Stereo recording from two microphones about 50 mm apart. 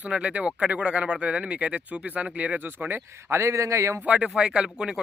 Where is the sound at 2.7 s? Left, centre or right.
Right.